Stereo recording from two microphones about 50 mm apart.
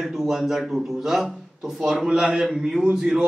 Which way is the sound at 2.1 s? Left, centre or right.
Centre.